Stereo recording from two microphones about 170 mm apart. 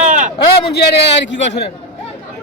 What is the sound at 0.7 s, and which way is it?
Speech, 75° left (ahead or behind).